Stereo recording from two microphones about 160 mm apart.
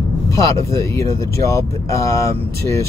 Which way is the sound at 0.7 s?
20° left (ahead or behind).